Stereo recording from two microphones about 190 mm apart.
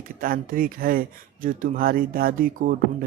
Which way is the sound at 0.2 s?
50° right (ahead or behind).